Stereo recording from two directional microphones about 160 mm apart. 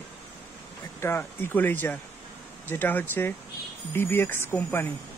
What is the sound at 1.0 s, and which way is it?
Speech, 15° left (ahead or behind).